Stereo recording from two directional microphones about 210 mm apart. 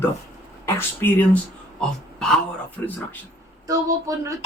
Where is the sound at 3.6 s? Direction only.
15° right (ahead or behind).